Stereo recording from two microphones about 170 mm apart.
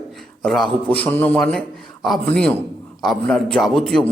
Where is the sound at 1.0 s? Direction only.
10° left (ahead or behind).